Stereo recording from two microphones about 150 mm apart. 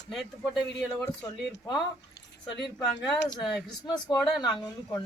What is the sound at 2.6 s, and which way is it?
Speech, centre (ahead or behind).